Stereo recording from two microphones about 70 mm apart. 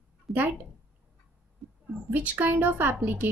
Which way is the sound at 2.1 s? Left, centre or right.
Right.